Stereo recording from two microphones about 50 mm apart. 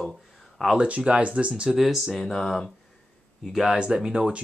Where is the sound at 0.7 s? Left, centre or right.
Right.